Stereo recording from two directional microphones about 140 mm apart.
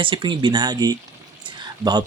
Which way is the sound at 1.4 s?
30° right (ahead or behind).